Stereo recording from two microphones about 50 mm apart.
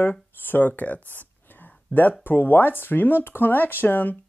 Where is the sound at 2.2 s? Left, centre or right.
Left.